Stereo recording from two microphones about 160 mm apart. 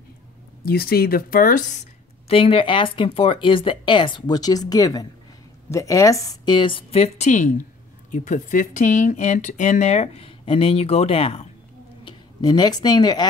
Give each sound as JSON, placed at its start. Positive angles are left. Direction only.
{"t": 0.7, "sound": "a woman's voice", "side_deg": 70}